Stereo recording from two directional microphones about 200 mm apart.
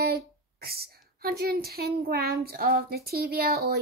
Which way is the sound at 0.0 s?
50° right (ahead or behind).